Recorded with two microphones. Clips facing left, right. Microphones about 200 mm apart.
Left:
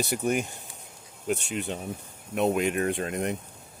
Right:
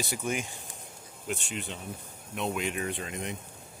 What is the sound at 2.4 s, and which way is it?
Speech, 55° left (ahead or behind).